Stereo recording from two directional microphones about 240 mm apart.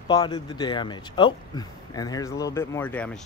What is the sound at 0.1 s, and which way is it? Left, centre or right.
Speech, centre.